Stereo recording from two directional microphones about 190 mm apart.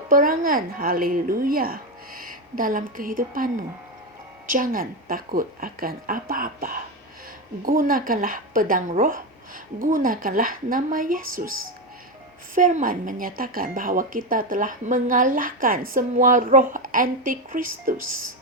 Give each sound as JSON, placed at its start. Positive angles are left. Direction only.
{"t": 0.1, "sound": "a woman's voice", "side_deg": -45}
{"t": 12.5, "sound": "a woman's voice", "side_deg": -45}